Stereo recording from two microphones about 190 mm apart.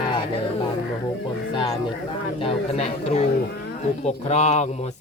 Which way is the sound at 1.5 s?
25° left (ahead or behind).